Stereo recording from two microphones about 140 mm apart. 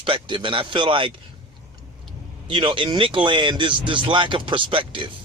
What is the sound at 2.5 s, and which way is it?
A man's voice, 35° right (ahead or behind).